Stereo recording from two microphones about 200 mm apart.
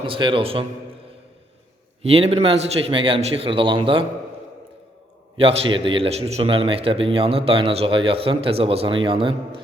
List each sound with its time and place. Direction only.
0.0 s a man's voice: 25° right (ahead or behind)
2.0 s a man's voice: 30° right (ahead or behind)
5.4 s a man's voice: 25° right (ahead or behind)